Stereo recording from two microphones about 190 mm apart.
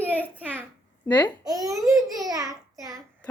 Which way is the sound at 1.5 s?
20° right (ahead or behind).